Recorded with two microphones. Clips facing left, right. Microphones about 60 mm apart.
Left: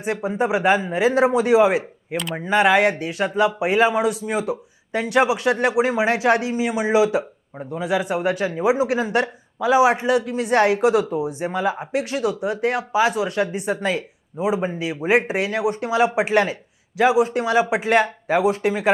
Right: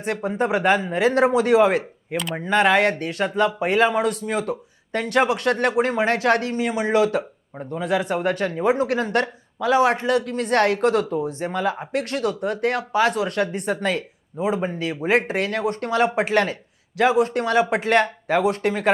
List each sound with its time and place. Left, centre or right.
0.0 s speech: centre